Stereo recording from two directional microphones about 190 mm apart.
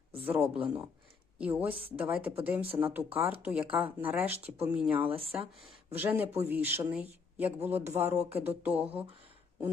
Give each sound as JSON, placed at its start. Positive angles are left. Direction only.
{"t": 0.3, "sound": "speech", "side_deg": -10}
{"t": 5.1, "sound": "speech", "side_deg": -30}
{"t": 6.0, "sound": "speech", "side_deg": -10}